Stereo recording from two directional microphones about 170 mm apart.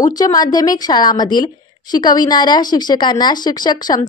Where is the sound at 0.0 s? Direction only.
20° left (ahead or behind).